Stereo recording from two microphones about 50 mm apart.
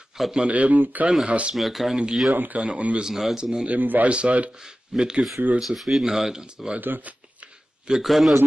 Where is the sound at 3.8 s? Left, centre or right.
Right.